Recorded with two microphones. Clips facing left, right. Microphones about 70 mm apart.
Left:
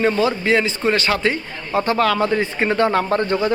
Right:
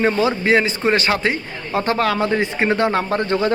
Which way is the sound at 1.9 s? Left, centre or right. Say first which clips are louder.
Left 1 dB; right.